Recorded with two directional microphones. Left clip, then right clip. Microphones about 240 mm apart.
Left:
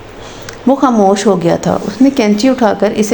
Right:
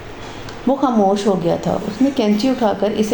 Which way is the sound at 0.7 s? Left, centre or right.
Left.